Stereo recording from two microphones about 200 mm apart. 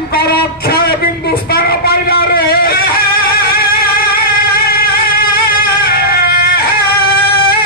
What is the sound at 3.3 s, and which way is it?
Music, 50° left (ahead or behind).